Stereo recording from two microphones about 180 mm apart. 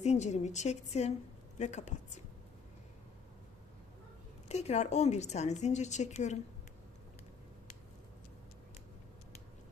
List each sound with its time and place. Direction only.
0.0 s a woman's voice: 40° left (ahead or behind)
4.4 s a woman's voice: 35° left (ahead or behind)